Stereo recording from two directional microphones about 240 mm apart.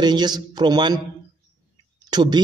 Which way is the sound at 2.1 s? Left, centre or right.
Centre.